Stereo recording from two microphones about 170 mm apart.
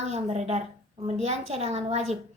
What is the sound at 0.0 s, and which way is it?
A woman's voice, 40° right (ahead or behind).